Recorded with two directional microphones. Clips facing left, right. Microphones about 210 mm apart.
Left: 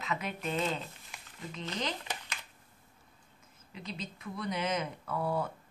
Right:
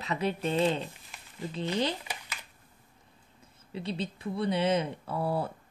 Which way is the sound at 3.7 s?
30° right (ahead or behind).